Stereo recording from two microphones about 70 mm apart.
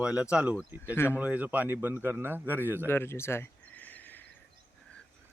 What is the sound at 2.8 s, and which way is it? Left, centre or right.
Speech, left.